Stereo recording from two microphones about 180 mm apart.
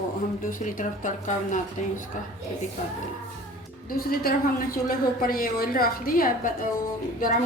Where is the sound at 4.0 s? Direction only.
55° left (ahead or behind).